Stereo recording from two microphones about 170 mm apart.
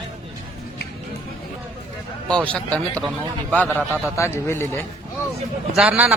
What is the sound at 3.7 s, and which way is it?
A man's voice, 15° left (ahead or behind).